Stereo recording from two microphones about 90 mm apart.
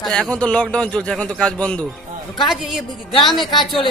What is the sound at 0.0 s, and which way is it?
A man's voice, 5° left (ahead or behind).